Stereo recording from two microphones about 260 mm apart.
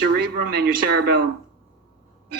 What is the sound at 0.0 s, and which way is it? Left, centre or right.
A man's voice, right.